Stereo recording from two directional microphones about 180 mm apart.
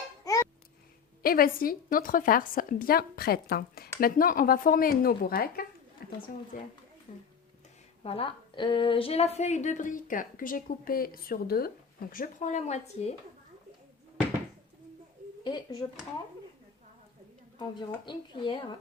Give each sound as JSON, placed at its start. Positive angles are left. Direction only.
{"t": 1.2, "sound": "a woman's voice", "side_deg": 55}
{"t": 6.0, "sound": "a sound", "side_deg": 55}
{"t": 6.5, "sound": "a woman's voice", "side_deg": 50}
{"t": 8.0, "sound": "a woman's voice", "side_deg": 30}
{"t": 15.4, "sound": "speech", "side_deg": 25}
{"t": 17.6, "sound": "speech", "side_deg": 25}